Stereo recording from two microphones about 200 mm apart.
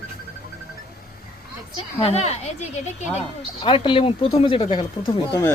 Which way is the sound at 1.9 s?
30° left (ahead or behind).